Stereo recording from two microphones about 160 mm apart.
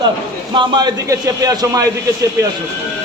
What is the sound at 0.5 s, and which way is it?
A man's voice, 30° right (ahead or behind).